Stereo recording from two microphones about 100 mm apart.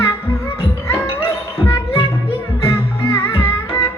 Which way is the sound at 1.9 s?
75° left (ahead or behind).